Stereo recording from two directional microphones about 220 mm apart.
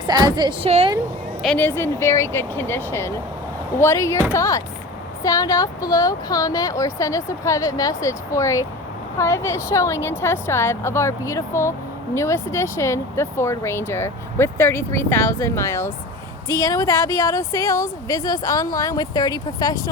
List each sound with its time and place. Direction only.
0.0 s a woman's voice: 20° right (ahead or behind)
1.4 s speech: 5° left (ahead or behind)